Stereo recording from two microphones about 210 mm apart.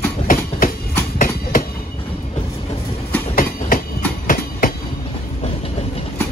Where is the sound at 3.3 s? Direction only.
40° left (ahead or behind).